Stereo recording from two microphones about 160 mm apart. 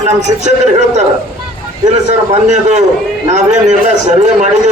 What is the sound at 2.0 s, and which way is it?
A man's voice, 45° right (ahead or behind).